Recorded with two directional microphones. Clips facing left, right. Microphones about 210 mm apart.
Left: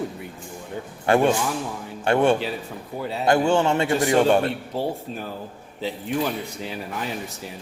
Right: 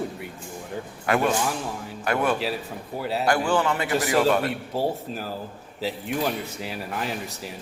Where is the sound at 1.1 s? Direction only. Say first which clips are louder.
Left 4 dB; 30° left (ahead or behind).